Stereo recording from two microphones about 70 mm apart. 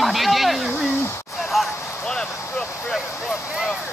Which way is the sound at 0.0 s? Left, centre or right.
Centre.